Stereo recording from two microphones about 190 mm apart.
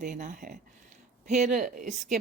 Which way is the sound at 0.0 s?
40° right (ahead or behind).